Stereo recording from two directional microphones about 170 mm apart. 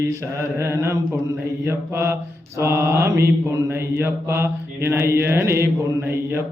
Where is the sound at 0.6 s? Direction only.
15° right (ahead or behind).